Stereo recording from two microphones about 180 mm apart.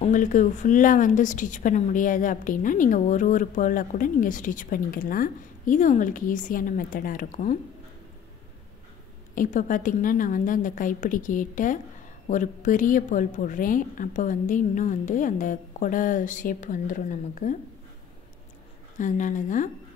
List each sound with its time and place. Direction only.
0.0 s speech: 45° left (ahead or behind)
9.3 s speech: 45° left (ahead or behind)
18.9 s speech: 45° left (ahead or behind)